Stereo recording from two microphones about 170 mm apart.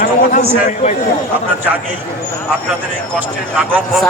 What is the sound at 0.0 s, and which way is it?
Speech, 50° left (ahead or behind).